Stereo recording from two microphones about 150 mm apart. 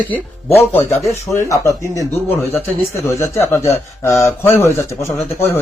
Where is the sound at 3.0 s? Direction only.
15° left (ahead or behind).